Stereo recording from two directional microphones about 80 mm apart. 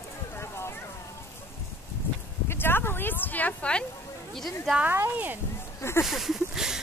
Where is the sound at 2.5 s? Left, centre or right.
Left.